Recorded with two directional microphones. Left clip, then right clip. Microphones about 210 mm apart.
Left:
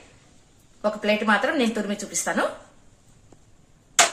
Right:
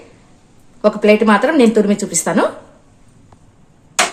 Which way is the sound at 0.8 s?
35° right (ahead or behind).